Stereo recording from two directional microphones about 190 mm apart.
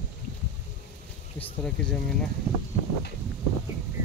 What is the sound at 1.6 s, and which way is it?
Speech, 5° left (ahead or behind).